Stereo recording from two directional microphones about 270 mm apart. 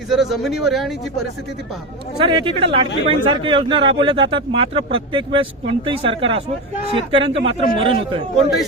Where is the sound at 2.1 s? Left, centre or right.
Centre.